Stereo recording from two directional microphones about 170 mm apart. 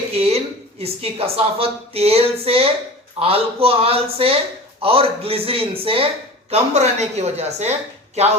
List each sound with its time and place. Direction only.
0.1 s a woman's voice: 35° right (ahead or behind)